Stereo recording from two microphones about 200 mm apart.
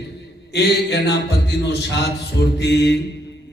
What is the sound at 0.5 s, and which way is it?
A man's voice, 55° left (ahead or behind).